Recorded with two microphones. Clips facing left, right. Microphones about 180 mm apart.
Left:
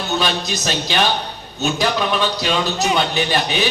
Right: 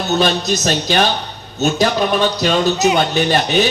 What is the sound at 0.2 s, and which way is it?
Speech, 45° right (ahead or behind).